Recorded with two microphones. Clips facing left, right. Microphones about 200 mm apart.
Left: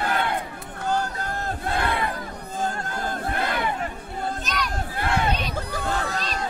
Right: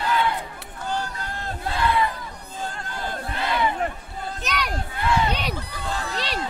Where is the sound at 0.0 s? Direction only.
55° left (ahead or behind).